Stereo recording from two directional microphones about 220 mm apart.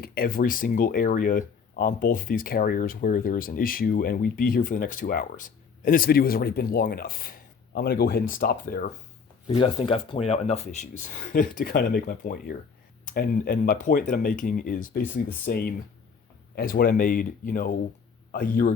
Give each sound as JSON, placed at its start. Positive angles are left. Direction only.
{"t": 0.0, "sound": "speech", "side_deg": 40}
{"t": 9.5, "sound": "speech", "side_deg": 25}